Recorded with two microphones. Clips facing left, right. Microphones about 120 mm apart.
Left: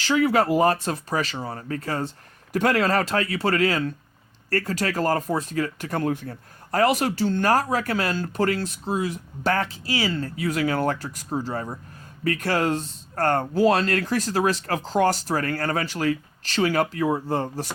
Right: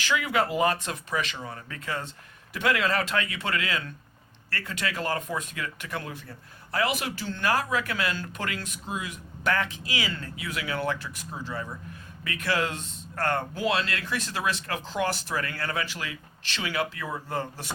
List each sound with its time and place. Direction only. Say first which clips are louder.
0.0 s speech: left 6 dB; 40° left (ahead or behind)